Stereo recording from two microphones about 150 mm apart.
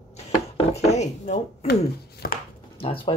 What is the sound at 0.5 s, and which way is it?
Speech, 45° left (ahead or behind).